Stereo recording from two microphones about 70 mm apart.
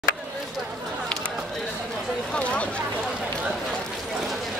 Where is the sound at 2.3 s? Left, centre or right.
Centre.